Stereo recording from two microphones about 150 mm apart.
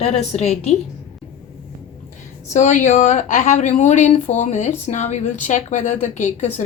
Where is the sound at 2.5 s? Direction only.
55° left (ahead or behind).